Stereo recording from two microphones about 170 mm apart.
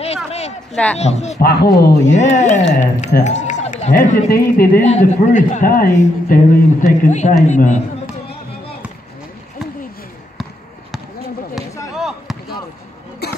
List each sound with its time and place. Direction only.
0.0 s a sound: 35° left (ahead or behind)
0.9 s speech: 40° left (ahead or behind)
1.4 s speech: 70° left (ahead or behind)
2.1 s a man's voice: 45° left (ahead or behind); by 4.8 s 60° left (ahead or behind)
4.8 s a man's voice: 45° left (ahead or behind)
7.1 s a man's voice: 45° left (ahead or behind)
11.9 s basketball bounce: centre (ahead or behind)
13.2 s cough: 70° left (ahead or behind)